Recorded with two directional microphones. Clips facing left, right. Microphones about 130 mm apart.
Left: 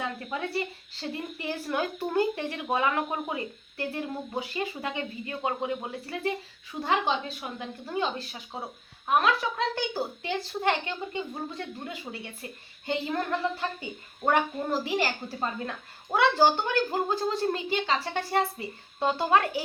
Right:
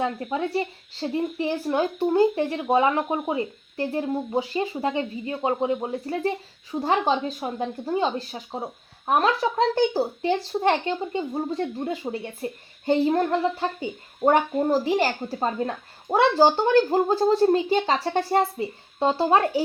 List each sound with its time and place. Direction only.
0.0 s speech: 30° right (ahead or behind)